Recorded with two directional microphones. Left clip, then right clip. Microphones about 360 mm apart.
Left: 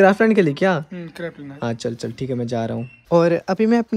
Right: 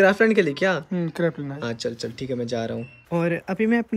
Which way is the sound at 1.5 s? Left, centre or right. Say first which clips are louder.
Left 3 dB; centre.